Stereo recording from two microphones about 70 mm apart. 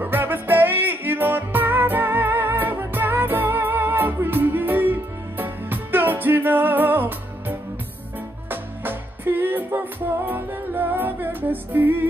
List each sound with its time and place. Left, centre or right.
0.0 s music: right